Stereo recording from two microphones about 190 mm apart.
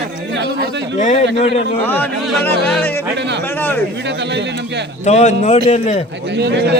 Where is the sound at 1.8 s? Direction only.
10° left (ahead or behind).